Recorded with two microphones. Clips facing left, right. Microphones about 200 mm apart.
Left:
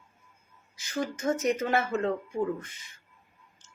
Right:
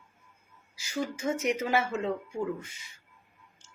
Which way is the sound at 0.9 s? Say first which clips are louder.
Left 2 dB; 10° right (ahead or behind).